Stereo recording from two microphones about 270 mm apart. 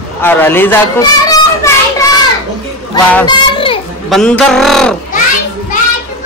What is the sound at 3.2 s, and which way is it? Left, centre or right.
Children playing, centre.